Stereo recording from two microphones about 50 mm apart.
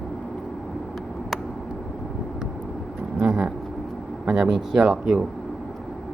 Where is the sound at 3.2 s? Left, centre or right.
Right.